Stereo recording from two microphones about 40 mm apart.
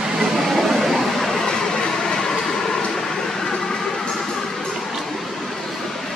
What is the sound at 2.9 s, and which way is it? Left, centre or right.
Train, centre.